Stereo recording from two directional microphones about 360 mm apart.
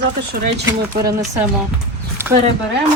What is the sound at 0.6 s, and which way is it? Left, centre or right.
Speech, centre.